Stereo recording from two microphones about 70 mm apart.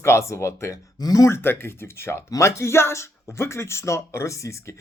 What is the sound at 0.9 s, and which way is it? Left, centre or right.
Speech, left.